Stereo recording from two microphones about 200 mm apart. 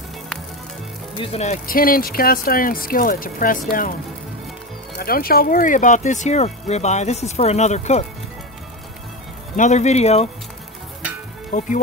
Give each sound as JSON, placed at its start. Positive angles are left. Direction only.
{"t": 1.1, "sound": "speech", "side_deg": 30}
{"t": 4.9, "sound": "speech", "side_deg": 45}
{"t": 9.6, "sound": "speech", "side_deg": 35}
{"t": 11.5, "sound": "speech", "side_deg": 40}